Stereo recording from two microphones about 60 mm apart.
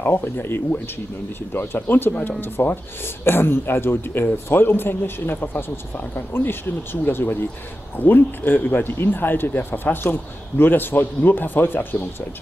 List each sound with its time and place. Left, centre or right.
0.0 s speech: left